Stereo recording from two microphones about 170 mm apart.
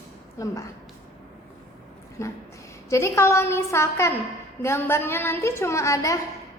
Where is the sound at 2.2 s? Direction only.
15° left (ahead or behind).